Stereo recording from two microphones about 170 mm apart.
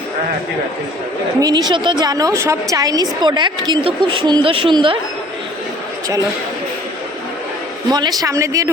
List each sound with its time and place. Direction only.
1.4 s a woman's voice: 25° right (ahead or behind)
7.9 s a woman's voice: 25° right (ahead or behind)